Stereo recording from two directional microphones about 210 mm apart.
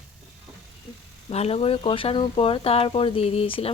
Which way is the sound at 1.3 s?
30° left (ahead or behind).